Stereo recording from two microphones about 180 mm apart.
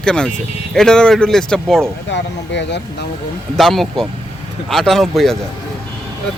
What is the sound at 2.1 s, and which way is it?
Speech, 75° left (ahead or behind).